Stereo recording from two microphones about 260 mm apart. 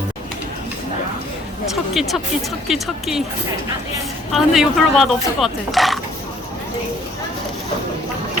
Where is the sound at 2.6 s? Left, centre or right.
Centre.